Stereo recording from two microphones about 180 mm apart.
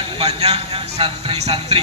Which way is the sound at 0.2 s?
35° right (ahead or behind).